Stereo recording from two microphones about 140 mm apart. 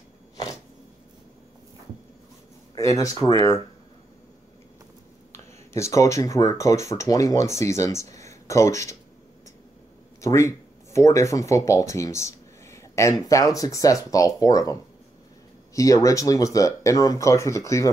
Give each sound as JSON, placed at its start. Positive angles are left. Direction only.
{"t": 2.7, "sound": "speech", "side_deg": 25}
{"t": 5.3, "sound": "speech", "side_deg": 20}
{"t": 10.2, "sound": "speech", "side_deg": 20}